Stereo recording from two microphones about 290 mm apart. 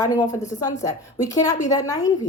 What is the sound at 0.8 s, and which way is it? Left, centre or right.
A woman's voice, centre.